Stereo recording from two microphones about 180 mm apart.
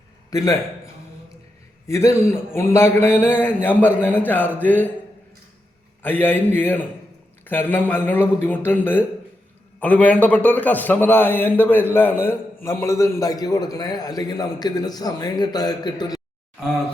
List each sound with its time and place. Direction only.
0.3 s a man's voice: 20° left (ahead or behind)
1.9 s a man's voice: 15° left (ahead or behind)
6.0 s a man's voice: 10° left (ahead or behind)